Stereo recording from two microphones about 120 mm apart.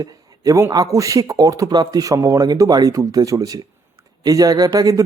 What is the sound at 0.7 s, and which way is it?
Speech, 30° right (ahead or behind).